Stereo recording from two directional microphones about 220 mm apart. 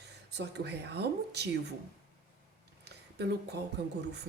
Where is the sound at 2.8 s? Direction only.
50° right (ahead or behind).